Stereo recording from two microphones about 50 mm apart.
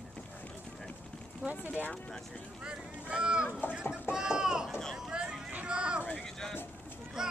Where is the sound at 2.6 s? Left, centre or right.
Centre.